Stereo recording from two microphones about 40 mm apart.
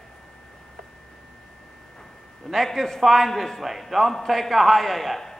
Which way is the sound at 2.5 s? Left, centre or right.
Centre.